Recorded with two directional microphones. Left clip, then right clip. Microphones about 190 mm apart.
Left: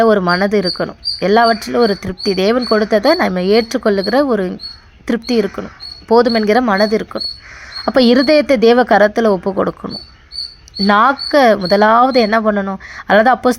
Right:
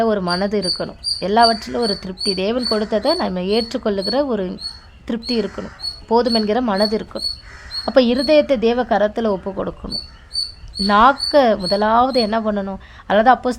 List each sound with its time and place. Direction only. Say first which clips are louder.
0.0 s a woman's voice: left 7 dB; 15° left (ahead or behind)